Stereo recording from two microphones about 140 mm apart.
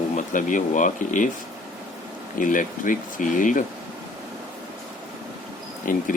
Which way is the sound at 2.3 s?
70° left (ahead or behind).